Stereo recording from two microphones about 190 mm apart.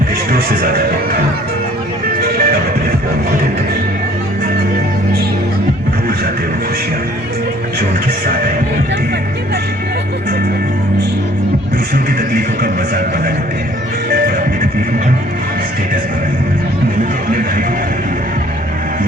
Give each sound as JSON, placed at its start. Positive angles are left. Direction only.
{"t": 0.3, "sound": "speech", "side_deg": -50}
{"t": 2.2, "sound": "music", "side_deg": -50}
{"t": 12.3, "sound": "music", "side_deg": -50}